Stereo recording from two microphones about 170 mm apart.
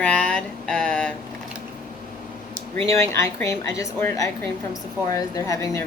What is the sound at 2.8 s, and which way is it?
A woman's voice, 15° left (ahead or behind).